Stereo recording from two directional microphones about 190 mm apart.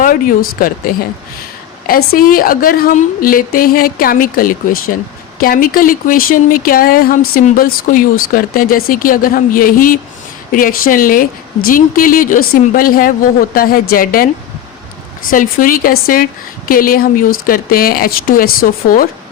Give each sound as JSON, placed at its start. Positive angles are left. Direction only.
{"t": 0.0, "sound": "a woman's voice", "side_deg": 45}
{"t": 15.3, "sound": "a woman's voice", "side_deg": 45}